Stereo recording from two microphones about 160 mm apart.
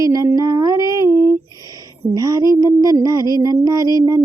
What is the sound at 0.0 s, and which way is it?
Female singing, 20° right (ahead or behind).